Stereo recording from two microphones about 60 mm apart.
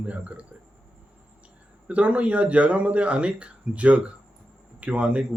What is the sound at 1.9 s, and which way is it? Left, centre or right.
Speech, right.